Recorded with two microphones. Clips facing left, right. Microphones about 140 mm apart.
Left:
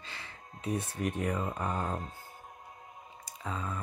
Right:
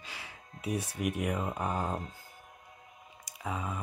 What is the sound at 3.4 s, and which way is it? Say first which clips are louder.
Speech: right 1 dB; 10° right (ahead or behind).